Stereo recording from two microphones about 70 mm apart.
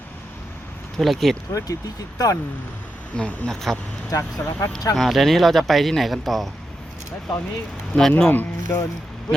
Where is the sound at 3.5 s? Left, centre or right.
Centre.